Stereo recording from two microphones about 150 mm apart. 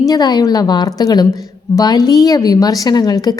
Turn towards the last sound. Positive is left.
turn(degrees=25)  # may be behind; listen again after turning